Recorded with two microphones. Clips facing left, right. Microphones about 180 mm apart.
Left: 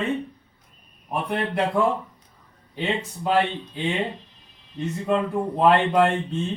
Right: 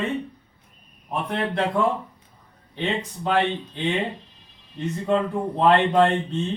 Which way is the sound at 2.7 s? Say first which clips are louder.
Even; 10° left (ahead or behind).